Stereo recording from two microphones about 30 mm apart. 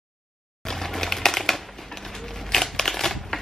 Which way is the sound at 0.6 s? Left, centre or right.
Centre.